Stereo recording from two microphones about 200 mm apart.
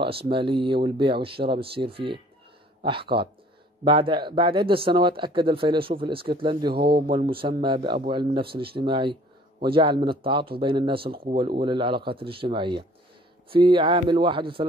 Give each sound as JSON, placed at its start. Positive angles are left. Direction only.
{"t": 0.0, "sound": "speech", "side_deg": -25}
{"t": 6.7, "sound": "speech", "side_deg": -50}
{"t": 7.1, "sound": "speech", "side_deg": -25}